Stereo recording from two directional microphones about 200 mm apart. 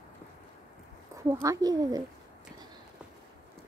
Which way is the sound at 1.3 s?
15° right (ahead or behind).